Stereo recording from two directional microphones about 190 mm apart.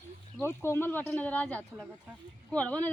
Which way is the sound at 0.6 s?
15° left (ahead or behind).